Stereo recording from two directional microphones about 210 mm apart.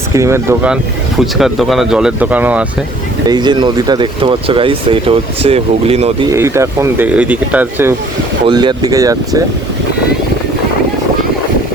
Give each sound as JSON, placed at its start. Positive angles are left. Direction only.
{"t": 0.1, "sound": "speech", "side_deg": -15}
{"t": 3.2, "sound": "speech", "side_deg": -20}
{"t": 6.3, "sound": "speech", "side_deg": -15}
{"t": 8.4, "sound": "speech", "side_deg": -20}